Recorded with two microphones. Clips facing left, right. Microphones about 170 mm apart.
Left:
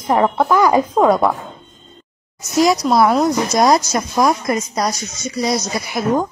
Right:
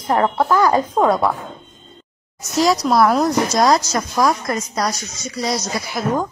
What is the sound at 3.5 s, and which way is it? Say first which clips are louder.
A woman's voice: left 3 dB; 15° left (ahead or behind).